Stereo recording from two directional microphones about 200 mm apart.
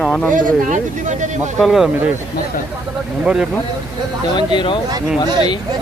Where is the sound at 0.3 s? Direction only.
40° right (ahead or behind).